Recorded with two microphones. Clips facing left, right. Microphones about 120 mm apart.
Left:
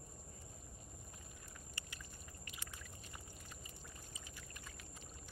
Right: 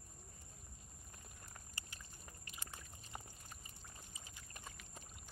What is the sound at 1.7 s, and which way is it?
Boat, 35° right (ahead or behind).